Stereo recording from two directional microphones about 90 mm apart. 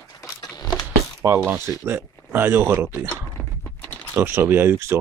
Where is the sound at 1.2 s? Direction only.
35° right (ahead or behind).